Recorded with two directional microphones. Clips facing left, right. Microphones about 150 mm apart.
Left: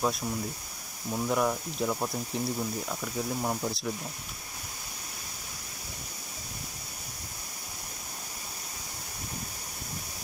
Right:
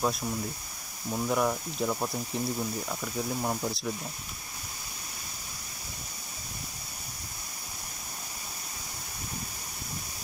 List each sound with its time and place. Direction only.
0.0 s speech: centre (ahead or behind)